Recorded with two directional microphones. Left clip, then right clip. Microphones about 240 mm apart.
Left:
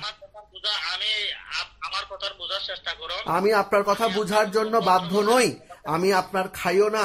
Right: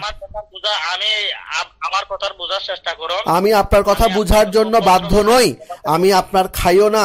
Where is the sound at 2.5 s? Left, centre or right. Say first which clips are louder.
Right 8 dB; right.